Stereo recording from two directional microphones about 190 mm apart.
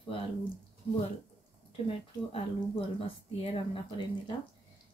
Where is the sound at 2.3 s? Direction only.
30° left (ahead or behind).